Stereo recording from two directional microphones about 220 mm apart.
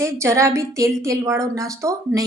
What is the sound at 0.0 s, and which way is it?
A woman's voice, 15° right (ahead or behind).